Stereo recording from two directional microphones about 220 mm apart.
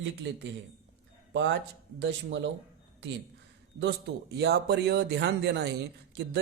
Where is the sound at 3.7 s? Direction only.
50° right (ahead or behind).